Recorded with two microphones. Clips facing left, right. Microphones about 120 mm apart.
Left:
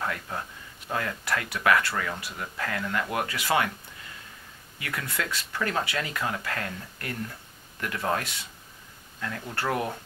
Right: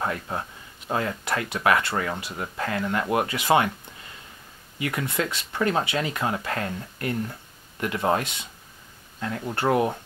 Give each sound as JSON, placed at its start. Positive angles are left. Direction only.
{"t": 0.0, "sound": "speech", "side_deg": -25}
{"t": 4.7, "sound": "speech", "side_deg": -20}